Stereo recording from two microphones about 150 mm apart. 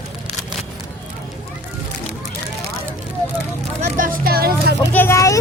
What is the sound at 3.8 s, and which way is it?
Speech, 75° right (ahead or behind).